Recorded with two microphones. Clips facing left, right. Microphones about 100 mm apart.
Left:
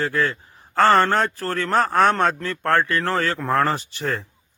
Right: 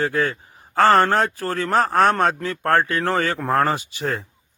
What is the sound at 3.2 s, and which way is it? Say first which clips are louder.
Speech: right 1 dB; 50° right (ahead or behind).